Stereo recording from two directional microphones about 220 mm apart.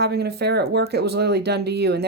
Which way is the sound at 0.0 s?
50° right (ahead or behind).